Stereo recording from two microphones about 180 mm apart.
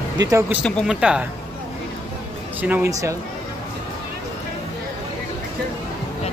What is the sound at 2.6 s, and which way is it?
Speech, 10° right (ahead or behind).